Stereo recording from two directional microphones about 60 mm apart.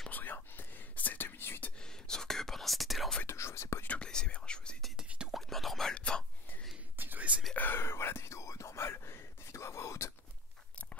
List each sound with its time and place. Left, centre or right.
0.1 s whispering: left
1.8 s whispering: centre
3.3 s whispering: left
4.0 s whispering: centre
5.3 s whispering: centre
5.9 s whispering: centre
7.0 s whispering: right
7.5 s whispering: left